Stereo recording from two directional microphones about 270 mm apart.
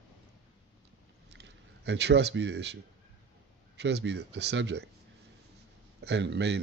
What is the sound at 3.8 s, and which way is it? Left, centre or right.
Speech, right.